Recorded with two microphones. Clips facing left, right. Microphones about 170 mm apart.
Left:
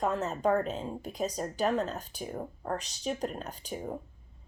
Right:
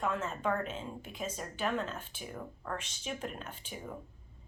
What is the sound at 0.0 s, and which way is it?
Speech, 40° left (ahead or behind).